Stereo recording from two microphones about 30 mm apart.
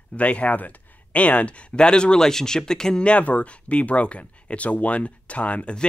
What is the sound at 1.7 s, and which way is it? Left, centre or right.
Speech, left.